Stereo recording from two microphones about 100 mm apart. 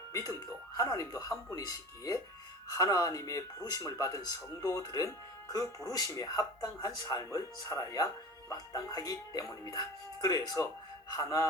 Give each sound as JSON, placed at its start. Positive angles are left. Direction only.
{"t": 0.1, "sound": "speech", "side_deg": 35}